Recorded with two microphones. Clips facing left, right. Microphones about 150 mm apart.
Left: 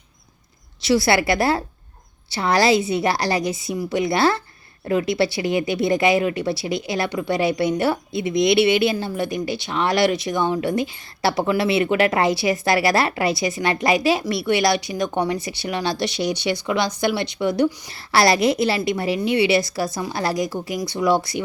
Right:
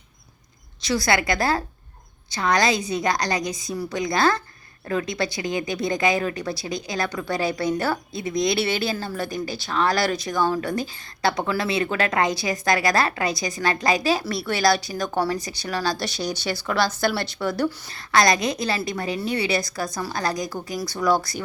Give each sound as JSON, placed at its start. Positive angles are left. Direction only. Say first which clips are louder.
{"t": 0.8, "sound": "speech", "louder": "left 4 dB", "side_deg": 25}